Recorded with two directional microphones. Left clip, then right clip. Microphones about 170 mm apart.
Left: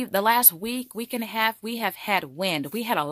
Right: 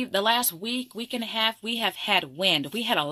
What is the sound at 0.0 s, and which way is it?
Speech, 45° left (ahead or behind).